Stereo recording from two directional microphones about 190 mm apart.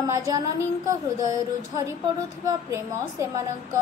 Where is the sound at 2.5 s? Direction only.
15° right (ahead or behind).